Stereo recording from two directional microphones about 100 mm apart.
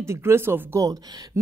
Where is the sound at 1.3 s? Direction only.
30° right (ahead or behind).